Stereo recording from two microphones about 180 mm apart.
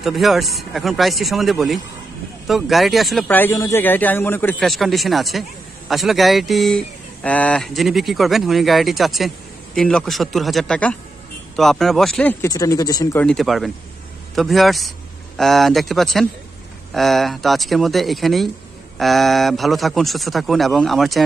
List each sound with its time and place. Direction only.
0.0 s speech: centre (ahead or behind)
4.6 s speech: centre (ahead or behind)
12.4 s speech: 20° left (ahead or behind)
13.2 s speech: centre (ahead or behind)